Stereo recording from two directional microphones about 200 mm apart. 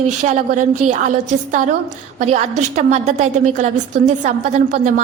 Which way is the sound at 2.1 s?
35° right (ahead or behind).